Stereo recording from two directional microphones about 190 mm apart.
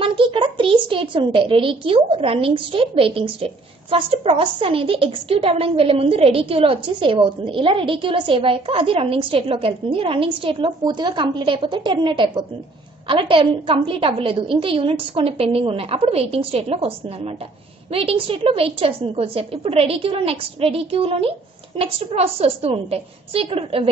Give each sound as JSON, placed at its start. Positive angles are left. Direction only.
{"t": 0.0, "sound": "a child's voice", "side_deg": -25}
{"t": 17.9, "sound": "a woman's voice", "side_deg": -30}